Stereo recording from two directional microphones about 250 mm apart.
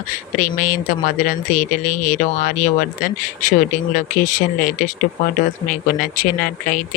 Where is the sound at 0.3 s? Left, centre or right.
Left.